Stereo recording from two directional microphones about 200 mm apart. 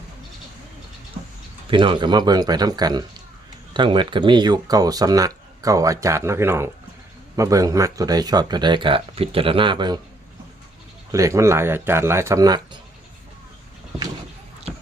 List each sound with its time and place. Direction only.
1.7 s speech: 25° right (ahead or behind)
11.1 s speech: 15° right (ahead or behind)